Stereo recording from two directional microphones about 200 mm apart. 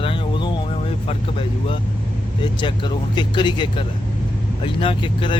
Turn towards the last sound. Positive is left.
turn(degrees=25)  # may be behind; listen again after turning